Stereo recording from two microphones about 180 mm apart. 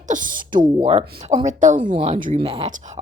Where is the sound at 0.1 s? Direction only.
50° right (ahead or behind).